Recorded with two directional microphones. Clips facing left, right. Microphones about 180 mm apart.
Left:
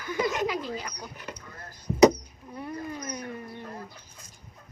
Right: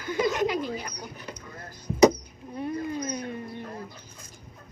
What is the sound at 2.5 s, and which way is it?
Dog, 25° right (ahead or behind).